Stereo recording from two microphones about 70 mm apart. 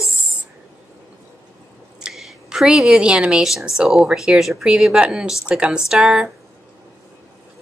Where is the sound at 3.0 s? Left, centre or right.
Centre.